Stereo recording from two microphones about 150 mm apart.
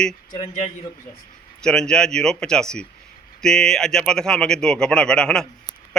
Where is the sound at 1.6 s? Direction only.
5° left (ahead or behind).